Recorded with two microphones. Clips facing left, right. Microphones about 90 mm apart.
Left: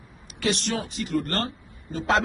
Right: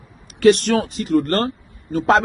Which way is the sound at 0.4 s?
50° right (ahead or behind).